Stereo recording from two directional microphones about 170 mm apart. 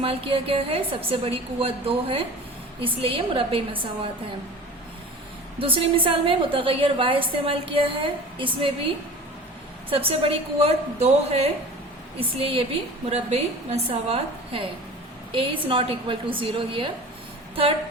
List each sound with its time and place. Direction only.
0.0 s a woman's voice: 30° right (ahead or behind)
5.5 s a woman's voice: 30° right (ahead or behind)
9.9 s a woman's voice: 35° right (ahead or behind)